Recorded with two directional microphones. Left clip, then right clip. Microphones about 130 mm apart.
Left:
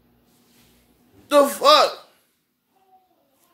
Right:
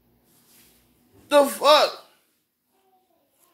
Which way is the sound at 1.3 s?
15° left (ahead or behind).